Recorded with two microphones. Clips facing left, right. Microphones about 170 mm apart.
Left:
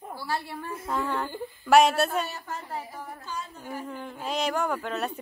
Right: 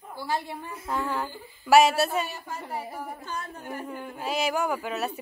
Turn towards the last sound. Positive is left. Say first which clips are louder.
# even
turn(degrees=-10)  # may be behind; listen again after turning